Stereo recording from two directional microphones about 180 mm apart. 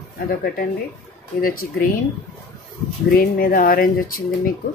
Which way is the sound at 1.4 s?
50° left (ahead or behind).